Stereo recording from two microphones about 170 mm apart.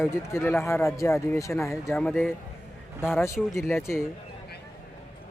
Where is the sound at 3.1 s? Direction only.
15° left (ahead or behind).